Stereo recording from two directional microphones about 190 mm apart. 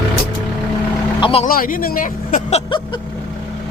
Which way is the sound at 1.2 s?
30° left (ahead or behind).